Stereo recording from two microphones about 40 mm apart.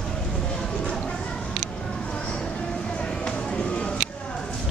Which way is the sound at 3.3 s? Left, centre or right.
Left.